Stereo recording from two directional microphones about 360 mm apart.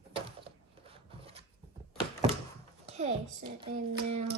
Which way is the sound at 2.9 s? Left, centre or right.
Centre.